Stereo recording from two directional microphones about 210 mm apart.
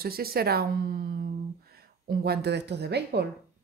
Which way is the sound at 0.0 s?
45° right (ahead or behind).